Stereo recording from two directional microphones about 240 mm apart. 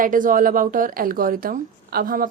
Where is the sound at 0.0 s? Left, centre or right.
Right.